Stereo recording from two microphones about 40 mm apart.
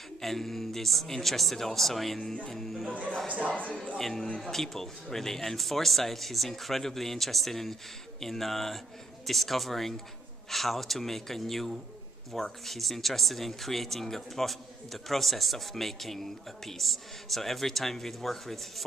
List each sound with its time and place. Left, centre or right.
0.2 s speech: centre
2.9 s speech: right
4.0 s speech: centre